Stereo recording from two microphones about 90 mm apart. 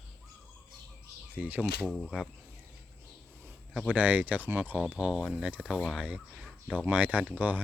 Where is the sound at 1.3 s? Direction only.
20° right (ahead or behind).